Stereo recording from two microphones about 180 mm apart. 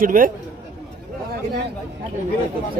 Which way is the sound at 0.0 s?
50° right (ahead or behind).